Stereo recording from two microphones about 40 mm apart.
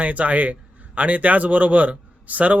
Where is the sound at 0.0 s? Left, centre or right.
Right.